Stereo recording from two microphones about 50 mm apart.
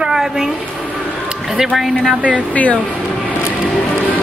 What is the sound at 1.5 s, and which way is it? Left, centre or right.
Speech, centre.